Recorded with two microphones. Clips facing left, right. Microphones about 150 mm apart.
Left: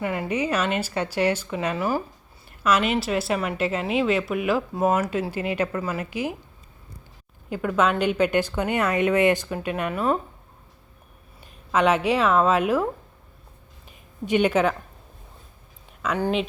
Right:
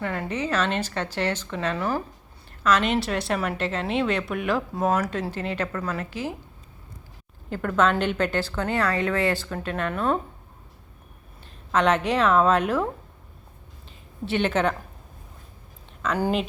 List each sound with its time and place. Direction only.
0.0 s a woman's voice: 10° left (ahead or behind)
7.5 s a woman's voice: 5° left (ahead or behind)
11.7 s a woman's voice: 10° left (ahead or behind)
14.3 s a woman's voice: 10° left (ahead or behind)
16.1 s speech: centre (ahead or behind)